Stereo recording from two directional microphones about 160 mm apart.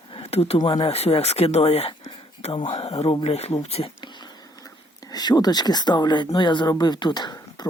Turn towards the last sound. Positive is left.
turn(degrees=25)  # may be behind; listen again after turning